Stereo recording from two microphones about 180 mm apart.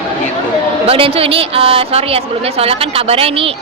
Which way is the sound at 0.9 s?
30° right (ahead or behind).